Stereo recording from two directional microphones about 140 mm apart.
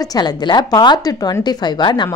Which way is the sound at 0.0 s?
25° left (ahead or behind).